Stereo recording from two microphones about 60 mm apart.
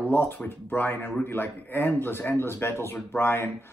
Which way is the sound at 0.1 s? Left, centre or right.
Left.